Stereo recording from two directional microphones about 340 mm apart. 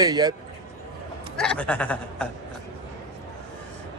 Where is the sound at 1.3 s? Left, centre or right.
Centre.